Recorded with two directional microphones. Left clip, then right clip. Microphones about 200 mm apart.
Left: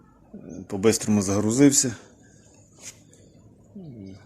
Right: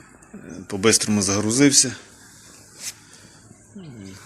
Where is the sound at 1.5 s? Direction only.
25° left (ahead or behind).